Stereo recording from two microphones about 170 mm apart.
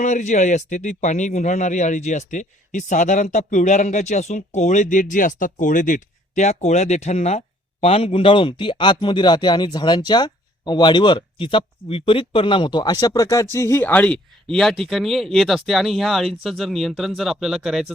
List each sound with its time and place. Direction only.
0.0 s a man's voice: 45° left (ahead or behind); by 17.9 s centre (ahead or behind)